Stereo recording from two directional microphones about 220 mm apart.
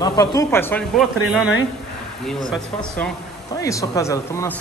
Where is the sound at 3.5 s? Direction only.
15° left (ahead or behind).